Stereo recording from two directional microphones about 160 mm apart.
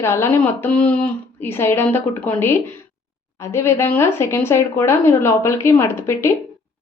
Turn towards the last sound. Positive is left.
turn(degrees=15)  # may be behind; listen again after turning